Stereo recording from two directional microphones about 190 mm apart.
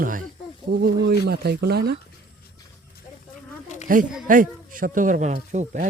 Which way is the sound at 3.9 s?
45° right (ahead or behind).